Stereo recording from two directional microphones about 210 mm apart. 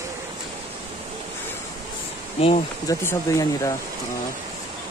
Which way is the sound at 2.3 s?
30° left (ahead or behind).